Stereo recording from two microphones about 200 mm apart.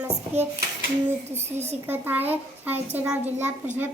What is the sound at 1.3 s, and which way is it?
Speech, 35° right (ahead or behind).